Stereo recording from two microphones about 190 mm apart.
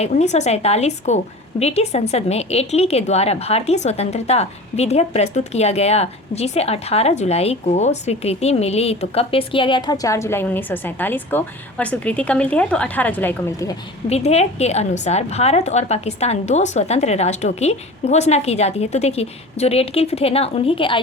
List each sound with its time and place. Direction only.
0.0 s a woman's voice: 35° left (ahead or behind); by 13.7 s 15° left (ahead or behind)
14.1 s a woman's voice: 35° left (ahead or behind)